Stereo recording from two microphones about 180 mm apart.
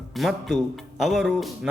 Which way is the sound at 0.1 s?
Centre (ahead or behind).